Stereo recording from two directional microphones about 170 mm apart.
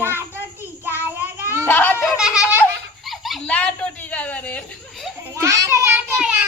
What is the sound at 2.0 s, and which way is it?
Baby laughter, 5° right (ahead or behind).